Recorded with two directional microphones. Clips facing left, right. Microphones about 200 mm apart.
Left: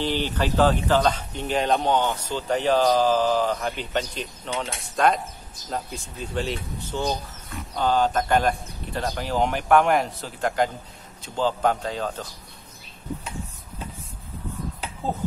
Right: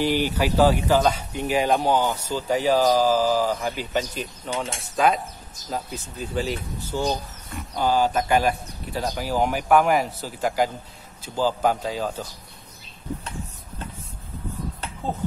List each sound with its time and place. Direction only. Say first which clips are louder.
0.0 s speech: right 3 dB; 10° right (ahead or behind)
15.0 s speech: left 1 dB; 5° left (ahead or behind)